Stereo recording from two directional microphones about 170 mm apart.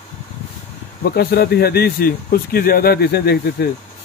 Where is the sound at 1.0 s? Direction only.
65° left (ahead or behind).